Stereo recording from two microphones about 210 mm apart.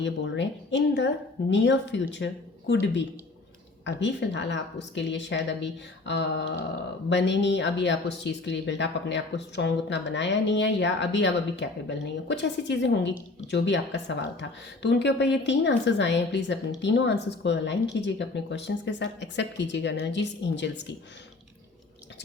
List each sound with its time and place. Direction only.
0.0 s a woman's voice: 60° left (ahead or behind)
3.8 s a woman's voice: 60° left (ahead or behind)